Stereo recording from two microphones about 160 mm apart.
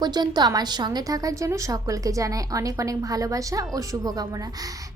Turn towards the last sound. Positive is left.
turn(degrees=-20)  # may be behind; listen again after turning